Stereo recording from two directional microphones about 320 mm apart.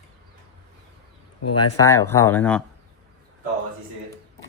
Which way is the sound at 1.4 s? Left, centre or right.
Left.